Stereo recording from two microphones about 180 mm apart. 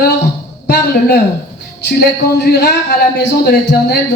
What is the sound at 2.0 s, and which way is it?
A man's voice, 65° left (ahead or behind).